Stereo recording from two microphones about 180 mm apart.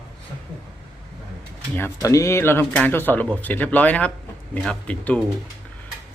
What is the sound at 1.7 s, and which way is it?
Speech, 15° left (ahead or behind).